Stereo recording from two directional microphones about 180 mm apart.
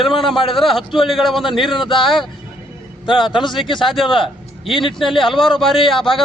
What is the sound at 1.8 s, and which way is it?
A man's voice, 30° left (ahead or behind).